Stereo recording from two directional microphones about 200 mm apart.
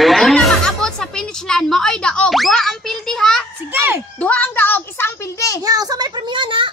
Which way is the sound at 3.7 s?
10° right (ahead or behind).